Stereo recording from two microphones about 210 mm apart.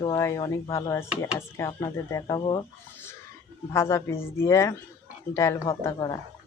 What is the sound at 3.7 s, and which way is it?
Speech, 10° left (ahead or behind).